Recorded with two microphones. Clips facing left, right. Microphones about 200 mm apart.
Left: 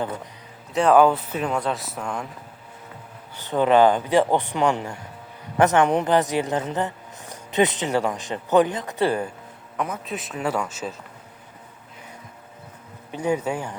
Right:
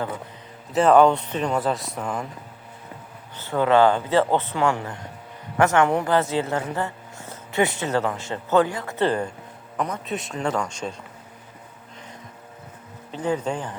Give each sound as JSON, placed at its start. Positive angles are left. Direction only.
{"t": 0.7, "sound": "speech", "side_deg": 0}
{"t": 3.3, "sound": "speech", "side_deg": 15}
{"t": 13.1, "sound": "speech", "side_deg": 10}